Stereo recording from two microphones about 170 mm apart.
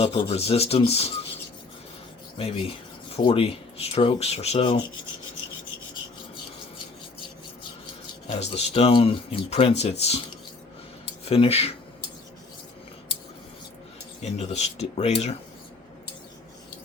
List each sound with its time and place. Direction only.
0.0 s speech: 35° left (ahead or behind)
2.4 s speech: 35° left (ahead or behind)
8.3 s speech: 40° left (ahead or behind)
11.3 s speech: 35° left (ahead or behind)
14.2 s speech: 40° left (ahead or behind)